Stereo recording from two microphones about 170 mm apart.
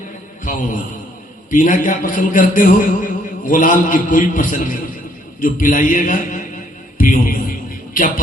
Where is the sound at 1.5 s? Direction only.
50° left (ahead or behind).